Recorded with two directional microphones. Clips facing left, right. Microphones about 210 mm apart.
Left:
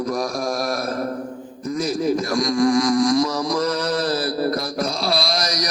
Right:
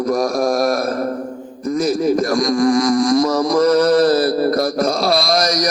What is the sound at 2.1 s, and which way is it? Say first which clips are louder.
Mantra: right 4 dB; 50° right (ahead or behind).